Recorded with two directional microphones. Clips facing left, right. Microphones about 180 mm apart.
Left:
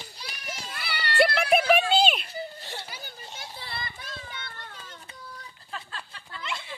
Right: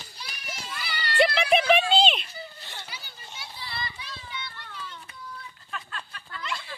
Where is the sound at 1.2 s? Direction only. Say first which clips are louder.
Even; 5° left (ahead or behind).